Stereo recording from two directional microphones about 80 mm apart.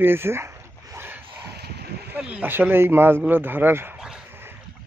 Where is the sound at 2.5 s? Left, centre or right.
Right.